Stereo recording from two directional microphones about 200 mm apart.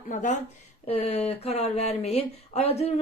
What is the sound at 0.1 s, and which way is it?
Speech, 40° left (ahead or behind).